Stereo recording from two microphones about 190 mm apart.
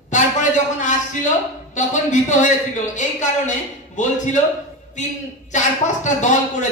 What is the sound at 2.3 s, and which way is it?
Speech, 40° left (ahead or behind).